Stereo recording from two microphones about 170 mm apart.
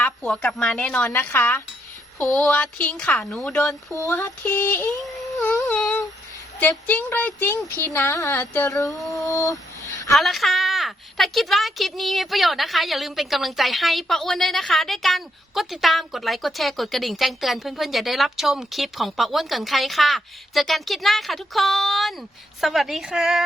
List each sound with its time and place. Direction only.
0.0 s a woman's voice: 5° left (ahead or behind)
3.9 s speech: 15° left (ahead or behind)
5.3 s a sound: 15° left (ahead or behind)
6.6 s speech: 10° left (ahead or behind)
8.9 s music: centre (ahead or behind)
9.2 s a sound: 20° left (ahead or behind)
10.1 s a woman's voice: centre (ahead or behind)